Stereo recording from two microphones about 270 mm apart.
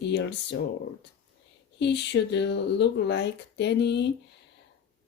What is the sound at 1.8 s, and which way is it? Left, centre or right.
Speech, left.